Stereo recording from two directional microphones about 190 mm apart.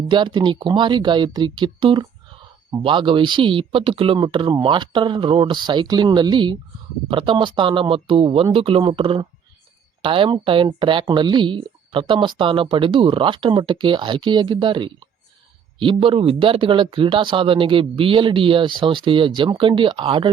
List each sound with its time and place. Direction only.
0.1 s speech: 25° right (ahead or behind)